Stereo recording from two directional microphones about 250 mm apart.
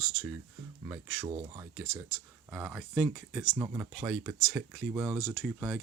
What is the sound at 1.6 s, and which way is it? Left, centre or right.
Speech, centre.